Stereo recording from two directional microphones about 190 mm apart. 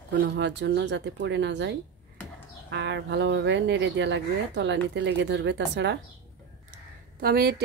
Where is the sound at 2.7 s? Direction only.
65° right (ahead or behind).